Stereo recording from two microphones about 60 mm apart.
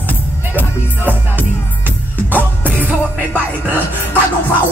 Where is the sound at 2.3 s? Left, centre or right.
Right.